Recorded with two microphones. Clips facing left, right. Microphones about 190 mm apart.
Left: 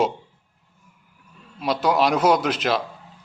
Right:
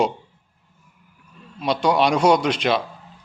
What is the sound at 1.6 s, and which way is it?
Speech, 5° left (ahead or behind).